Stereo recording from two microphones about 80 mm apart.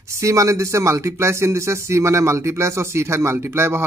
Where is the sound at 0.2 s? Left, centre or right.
Right.